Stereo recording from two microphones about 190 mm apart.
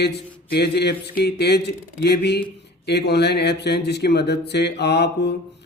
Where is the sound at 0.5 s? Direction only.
60° left (ahead or behind).